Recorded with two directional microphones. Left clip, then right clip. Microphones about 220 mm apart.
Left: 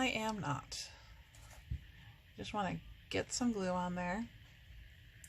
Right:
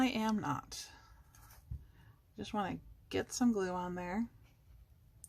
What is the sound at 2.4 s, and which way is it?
Speech, 25° right (ahead or behind).